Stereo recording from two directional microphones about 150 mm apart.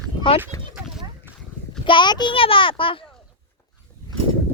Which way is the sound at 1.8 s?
30° left (ahead or behind).